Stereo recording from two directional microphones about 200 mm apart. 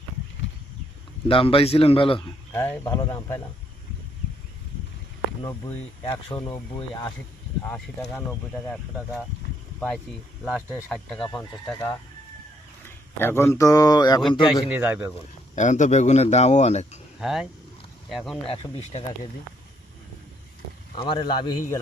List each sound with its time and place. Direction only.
1.3 s speech: 25° left (ahead or behind)
2.5 s speech: 15° left (ahead or behind)
6.1 s speech: 25° left (ahead or behind)
7.6 s speech: 10° left (ahead or behind)
10.4 s speech: centre (ahead or behind)
11.7 s speech: 15° left (ahead or behind)
13.1 s speech: 10° left (ahead or behind)
14.7 s a man's voice: 10° right (ahead or behind)
15.5 s speech: 40° left (ahead or behind)
17.2 s speech: centre (ahead or behind)
18.4 s speech: 25° left (ahead or behind)
20.9 s speech: 25° left (ahead or behind)